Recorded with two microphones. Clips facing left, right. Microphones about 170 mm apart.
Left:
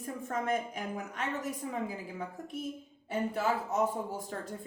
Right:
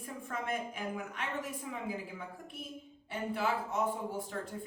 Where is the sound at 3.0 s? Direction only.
40° left (ahead or behind).